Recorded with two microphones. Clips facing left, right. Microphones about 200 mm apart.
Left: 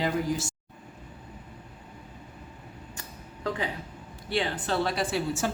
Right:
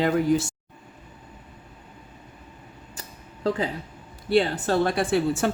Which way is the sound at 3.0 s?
35° right (ahead or behind).